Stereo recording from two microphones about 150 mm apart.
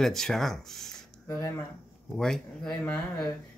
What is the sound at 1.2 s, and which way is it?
Speech, 20° left (ahead or behind).